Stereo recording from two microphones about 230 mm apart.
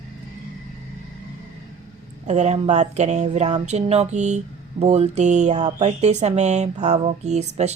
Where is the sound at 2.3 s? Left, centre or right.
Right.